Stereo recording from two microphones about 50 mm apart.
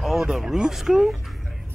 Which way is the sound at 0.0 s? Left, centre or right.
Centre.